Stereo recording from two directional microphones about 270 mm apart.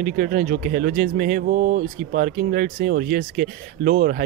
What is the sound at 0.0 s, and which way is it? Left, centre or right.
Speech, right.